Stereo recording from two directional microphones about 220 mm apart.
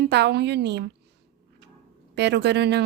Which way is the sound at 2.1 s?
50° right (ahead or behind).